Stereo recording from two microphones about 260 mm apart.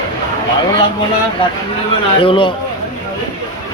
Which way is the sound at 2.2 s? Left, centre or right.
Centre.